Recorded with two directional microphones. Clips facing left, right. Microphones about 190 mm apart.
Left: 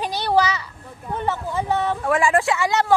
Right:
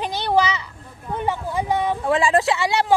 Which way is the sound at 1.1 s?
15° right (ahead or behind).